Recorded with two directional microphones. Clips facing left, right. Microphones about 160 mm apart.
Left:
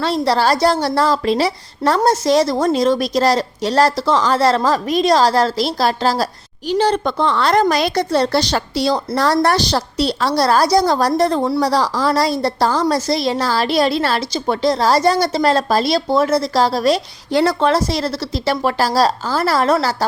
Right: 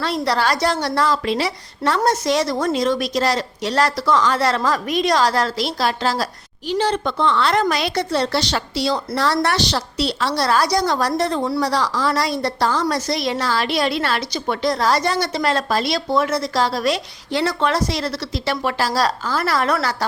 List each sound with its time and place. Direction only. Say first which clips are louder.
0.0 s a woman's voice: left 4 dB; 30° left (ahead or behind)